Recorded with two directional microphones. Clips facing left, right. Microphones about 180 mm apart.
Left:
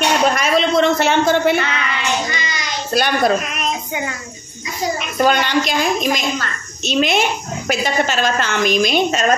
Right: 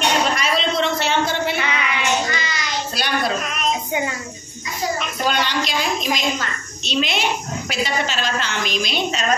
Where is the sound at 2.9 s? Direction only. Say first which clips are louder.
Left 8 dB; 50° left (ahead or behind).